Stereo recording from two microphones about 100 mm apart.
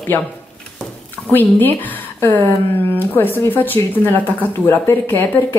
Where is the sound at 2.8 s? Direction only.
20° left (ahead or behind).